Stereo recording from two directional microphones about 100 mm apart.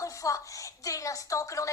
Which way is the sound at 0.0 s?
35° left (ahead or behind).